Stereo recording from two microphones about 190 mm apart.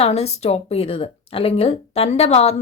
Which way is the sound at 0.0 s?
35° left (ahead or behind).